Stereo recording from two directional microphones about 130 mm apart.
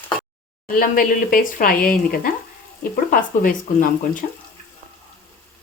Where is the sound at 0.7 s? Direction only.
90° left.